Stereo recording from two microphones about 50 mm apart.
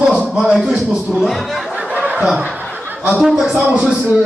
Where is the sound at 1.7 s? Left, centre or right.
Right.